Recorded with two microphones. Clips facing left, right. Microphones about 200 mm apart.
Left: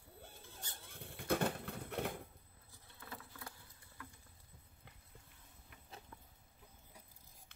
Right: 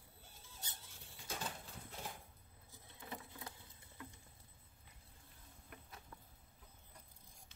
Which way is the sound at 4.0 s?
20° right (ahead or behind).